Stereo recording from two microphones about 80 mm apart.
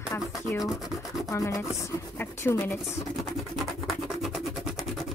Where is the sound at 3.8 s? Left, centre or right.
Centre.